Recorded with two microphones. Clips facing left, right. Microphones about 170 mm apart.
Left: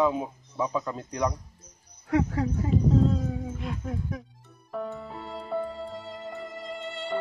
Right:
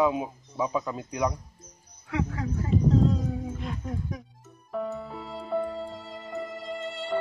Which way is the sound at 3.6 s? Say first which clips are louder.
Left 1 dB; centre (ahead or behind).